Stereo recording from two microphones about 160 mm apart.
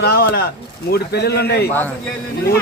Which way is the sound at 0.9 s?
90° left.